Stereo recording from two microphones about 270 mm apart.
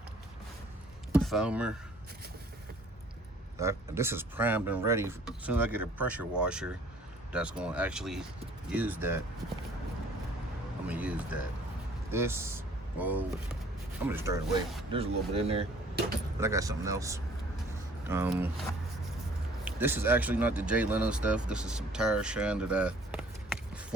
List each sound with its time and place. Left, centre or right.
1.1 s speech: centre
3.6 s speech: centre
10.8 s music: centre
12.1 s speech: centre
14.9 s speech: right
19.6 s speech: centre